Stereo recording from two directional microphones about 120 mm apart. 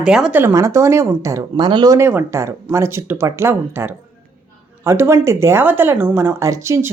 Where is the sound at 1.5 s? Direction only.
40° right (ahead or behind).